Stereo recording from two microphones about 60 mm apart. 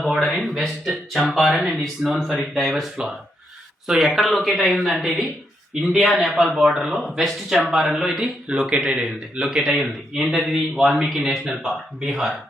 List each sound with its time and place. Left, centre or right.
0.0 s a man's voice: centre
8.2 s speech: centre
9.6 s a man's voice: centre